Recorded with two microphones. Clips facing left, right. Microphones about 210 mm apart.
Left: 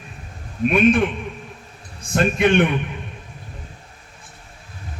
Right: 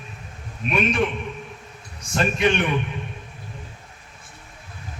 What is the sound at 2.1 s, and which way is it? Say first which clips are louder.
Speech: left 4 dB; 55° left (ahead or behind).